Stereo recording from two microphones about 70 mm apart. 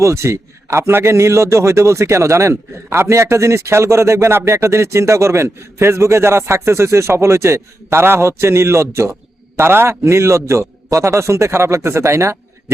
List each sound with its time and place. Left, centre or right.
0.0 s a man's voice: right